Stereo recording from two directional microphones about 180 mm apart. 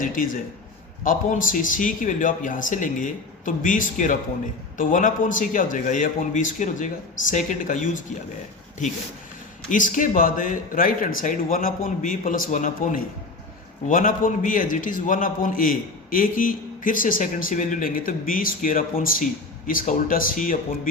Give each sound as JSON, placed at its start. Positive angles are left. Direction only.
{"t": 0.0, "sound": "a man's voice", "side_deg": 50}
{"t": 9.6, "sound": "a man's voice", "side_deg": 45}